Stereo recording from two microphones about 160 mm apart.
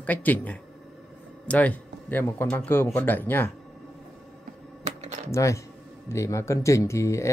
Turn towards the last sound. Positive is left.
turn(degrees=20)  # may be behind; listen again after turning